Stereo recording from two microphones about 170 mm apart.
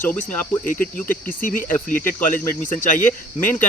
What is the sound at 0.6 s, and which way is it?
Cricket, 55° left (ahead or behind).